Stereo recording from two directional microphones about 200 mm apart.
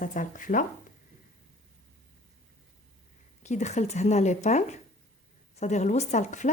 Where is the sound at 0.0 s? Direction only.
40° left (ahead or behind).